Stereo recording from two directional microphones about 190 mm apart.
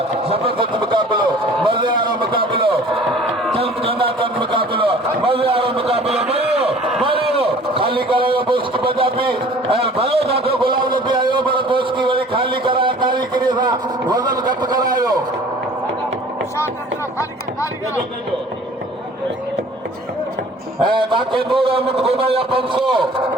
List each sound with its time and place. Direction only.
0.3 s a sound: 30° right (ahead or behind)
9.8 s a man's voice: 30° right (ahead or behind)
20.8 s a man's voice: 25° right (ahead or behind)